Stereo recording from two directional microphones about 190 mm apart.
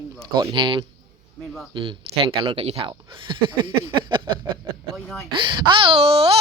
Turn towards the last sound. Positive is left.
turn(degrees=-30)  # may be behind; listen again after turning